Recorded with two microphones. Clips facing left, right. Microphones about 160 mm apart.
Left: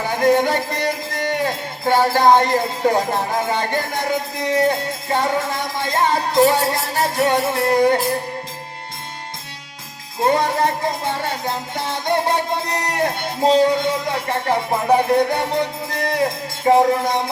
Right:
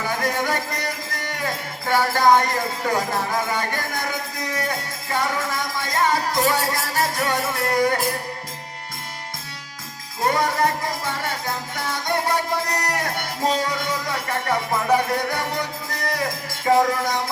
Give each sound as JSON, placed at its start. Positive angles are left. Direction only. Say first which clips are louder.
{"t": 0.2, "sound": "music", "louder": "left 8 dB", "side_deg": 30}
{"t": 10.2, "sound": "music", "louder": "left 3 dB", "side_deg": 25}
{"t": 16.0, "sound": "speech", "louder": "left 6 dB", "side_deg": 30}